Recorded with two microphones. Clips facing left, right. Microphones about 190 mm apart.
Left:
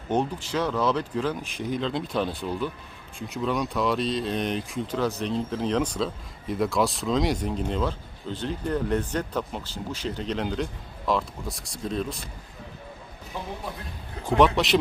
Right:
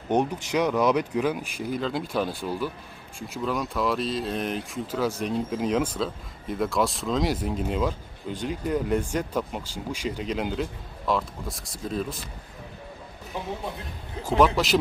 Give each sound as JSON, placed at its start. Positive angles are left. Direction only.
{"t": 0.1, "sound": "speech", "side_deg": -15}
{"t": 14.3, "sound": "speech", "side_deg": 0}